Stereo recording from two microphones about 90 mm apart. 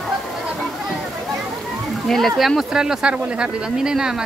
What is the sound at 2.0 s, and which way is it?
Speech, centre (ahead or behind).